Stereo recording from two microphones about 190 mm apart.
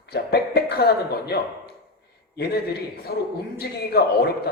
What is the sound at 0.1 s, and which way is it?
Cough, 55° left (ahead or behind).